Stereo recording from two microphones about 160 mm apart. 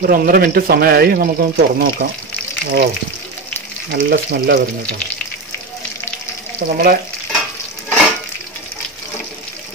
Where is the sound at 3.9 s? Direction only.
90° right.